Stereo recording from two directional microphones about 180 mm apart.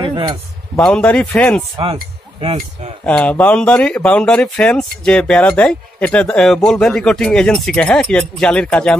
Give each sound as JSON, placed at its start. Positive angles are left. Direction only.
{"t": 0.0, "sound": "a sound", "side_deg": -25}
{"t": 0.7, "sound": "speech", "side_deg": 5}
{"t": 3.1, "sound": "speech", "side_deg": 5}